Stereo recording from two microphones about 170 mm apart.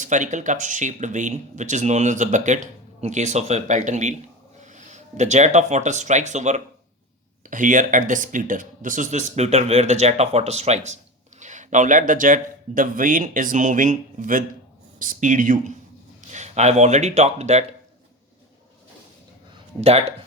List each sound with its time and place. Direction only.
0.0 s speech: 45° right (ahead or behind)
19.8 s speech: 35° right (ahead or behind)